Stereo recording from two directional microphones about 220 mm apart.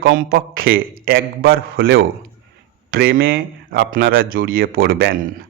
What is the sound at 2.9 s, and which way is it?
A man's voice, 40° right (ahead or behind).